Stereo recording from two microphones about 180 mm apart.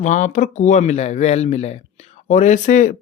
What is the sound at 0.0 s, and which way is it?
Speech, 40° left (ahead or behind).